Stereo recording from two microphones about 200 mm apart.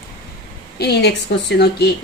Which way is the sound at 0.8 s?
55° left (ahead or behind).